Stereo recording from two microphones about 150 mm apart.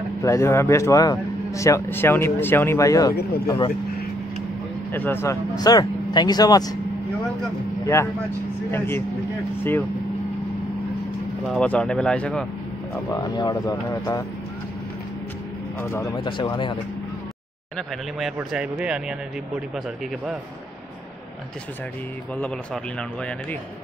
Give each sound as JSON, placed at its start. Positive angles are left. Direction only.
{"t": 0.2, "sound": "speech", "side_deg": 20}
{"t": 3.4, "sound": "speech", "side_deg": 30}
{"t": 4.9, "sound": "speech", "side_deg": 15}
{"t": 7.8, "sound": "speech", "side_deg": 20}
{"t": 11.4, "sound": "speech", "side_deg": 5}
{"t": 13.1, "sound": "speech", "side_deg": 25}
{"t": 15.8, "sound": "speech", "side_deg": 15}
{"t": 16.3, "sound": "speech", "side_deg": 30}
{"t": 17.7, "sound": "speech", "side_deg": 0}